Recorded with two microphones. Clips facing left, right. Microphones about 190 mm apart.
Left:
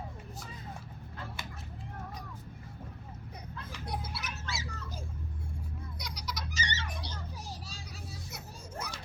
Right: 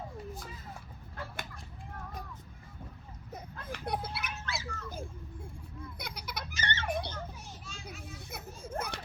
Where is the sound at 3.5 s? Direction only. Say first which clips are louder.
Right 4 dB; 55° right (ahead or behind).